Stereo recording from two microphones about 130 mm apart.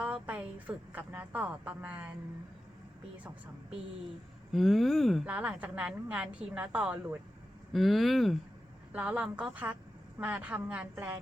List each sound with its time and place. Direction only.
0.0 s a woman's voice: 10° right (ahead or behind)
4.5 s speech: centre (ahead or behind)
5.2 s a woman's voice: 10° right (ahead or behind)
7.7 s a woman's voice: centre (ahead or behind); by 11.2 s 15° right (ahead or behind)